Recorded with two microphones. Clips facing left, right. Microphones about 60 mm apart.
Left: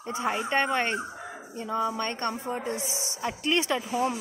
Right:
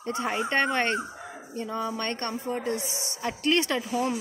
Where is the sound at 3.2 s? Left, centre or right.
Centre.